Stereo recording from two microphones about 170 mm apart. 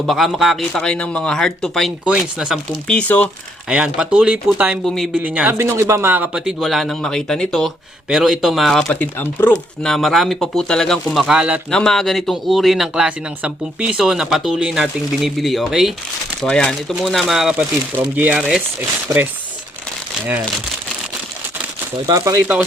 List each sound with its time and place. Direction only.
0.0 s speech: centre (ahead or behind)
2.8 s speech: 5° left (ahead or behind)
3.7 s speech: 5° right (ahead or behind)
22.0 s speech: 20° right (ahead or behind)